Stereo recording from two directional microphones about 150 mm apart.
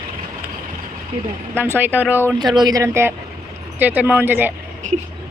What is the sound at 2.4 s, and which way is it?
Speech, 30° right (ahead or behind).